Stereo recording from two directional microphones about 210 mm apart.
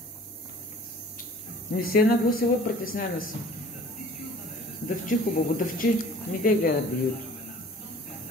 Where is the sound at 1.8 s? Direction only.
45° left (ahead or behind).